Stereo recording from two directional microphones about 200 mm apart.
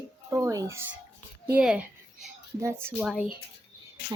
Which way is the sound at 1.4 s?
5° right (ahead or behind).